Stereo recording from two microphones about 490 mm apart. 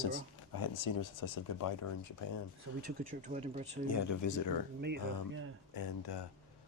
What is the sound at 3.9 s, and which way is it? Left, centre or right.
Speech, left.